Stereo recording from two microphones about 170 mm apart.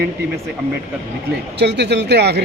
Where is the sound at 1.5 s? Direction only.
85° right.